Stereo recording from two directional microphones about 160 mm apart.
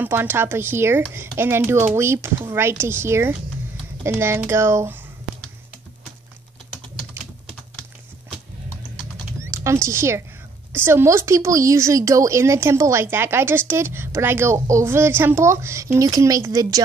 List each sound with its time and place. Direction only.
0.0 s a woman's voice: 15° right (ahead or behind)
9.4 s a woman's voice: 20° right (ahead or behind)